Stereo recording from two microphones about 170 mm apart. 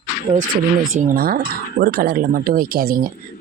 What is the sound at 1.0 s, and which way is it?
Speech, 55° right (ahead or behind).